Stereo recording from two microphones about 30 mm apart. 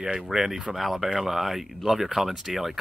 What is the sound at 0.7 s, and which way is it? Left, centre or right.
Speech, centre.